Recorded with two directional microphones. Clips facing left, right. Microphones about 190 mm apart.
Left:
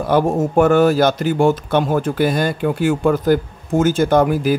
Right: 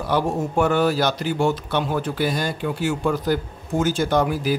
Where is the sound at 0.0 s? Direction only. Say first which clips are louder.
Left 6 dB; 50° left (ahead or behind).